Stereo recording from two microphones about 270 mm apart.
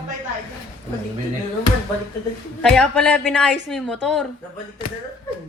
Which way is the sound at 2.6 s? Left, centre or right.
Centre.